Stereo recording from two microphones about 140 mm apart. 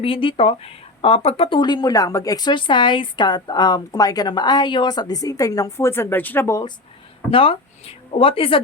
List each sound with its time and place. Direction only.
0.0 s speech: 40° left (ahead or behind); by 6.7 s 20° left (ahead or behind)
7.3 s speech: 40° left (ahead or behind)